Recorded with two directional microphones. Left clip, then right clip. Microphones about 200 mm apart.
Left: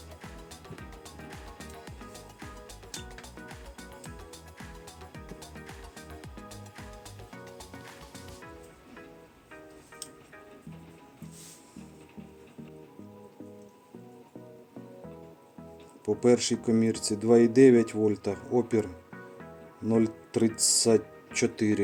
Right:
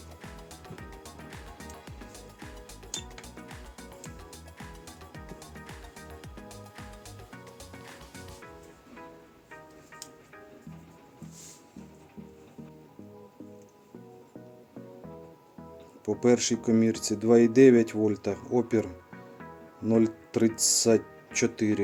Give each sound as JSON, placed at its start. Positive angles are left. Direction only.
{"t": 0.8, "sound": "music", "side_deg": 0}
{"t": 5.6, "sound": "music", "side_deg": 0}
{"t": 16.0, "sound": "speech", "side_deg": -5}